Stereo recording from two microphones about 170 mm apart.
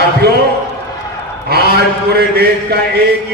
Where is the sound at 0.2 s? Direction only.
65° right (ahead or behind).